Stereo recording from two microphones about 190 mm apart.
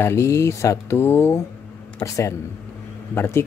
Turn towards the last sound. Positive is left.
turn(degrees=15)  # may be behind; listen again after turning